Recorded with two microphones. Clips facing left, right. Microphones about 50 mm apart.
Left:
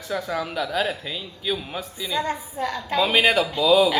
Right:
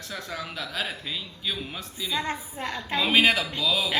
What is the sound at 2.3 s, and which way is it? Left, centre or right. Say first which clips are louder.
Speech: left 5 dB; centre.